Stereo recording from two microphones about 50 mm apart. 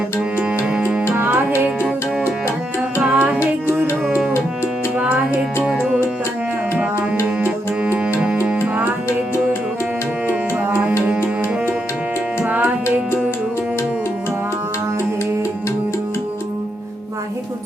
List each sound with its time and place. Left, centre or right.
1.1 s music: right
4.9 s music: right
8.4 s music: right
9.0 s music: left
10.2 s music: right
11.0 s tabla: right
12.4 s music: right